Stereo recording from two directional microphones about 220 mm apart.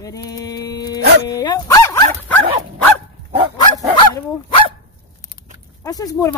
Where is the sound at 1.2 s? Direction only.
20° left (ahead or behind).